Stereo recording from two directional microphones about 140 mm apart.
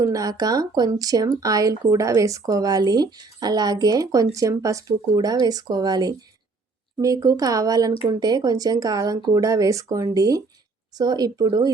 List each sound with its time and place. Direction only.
0.0 s speech: 25° right (ahead or behind)